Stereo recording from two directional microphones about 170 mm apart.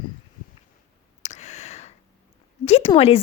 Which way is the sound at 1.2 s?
45° left (ahead or behind).